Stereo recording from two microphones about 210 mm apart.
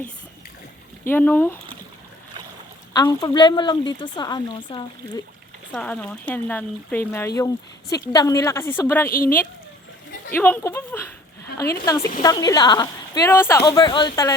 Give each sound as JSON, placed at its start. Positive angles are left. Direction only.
{"t": 1.1, "sound": "speech", "side_deg": 10}
{"t": 2.9, "sound": "speech", "side_deg": 15}
{"t": 5.7, "sound": "speech", "side_deg": 5}
{"t": 9.0, "sound": "speech", "side_deg": 45}
{"t": 10.3, "sound": "speech", "side_deg": 10}
{"t": 12.2, "sound": "speech", "side_deg": 20}